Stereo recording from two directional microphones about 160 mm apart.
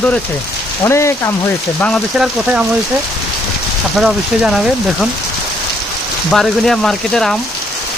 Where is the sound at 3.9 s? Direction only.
Centre (ahead or behind).